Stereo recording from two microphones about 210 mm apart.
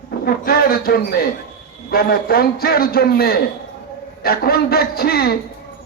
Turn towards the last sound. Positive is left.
turn(degrees=45)  # may be behind; listen again after turning